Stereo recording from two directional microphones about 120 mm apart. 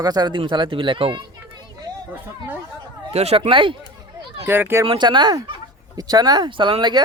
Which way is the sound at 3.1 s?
60° right (ahead or behind).